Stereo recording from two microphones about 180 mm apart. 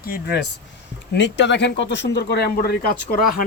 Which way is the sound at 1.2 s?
80° left.